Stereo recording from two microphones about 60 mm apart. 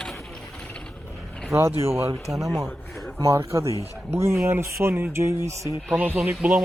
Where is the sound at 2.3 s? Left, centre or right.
Centre.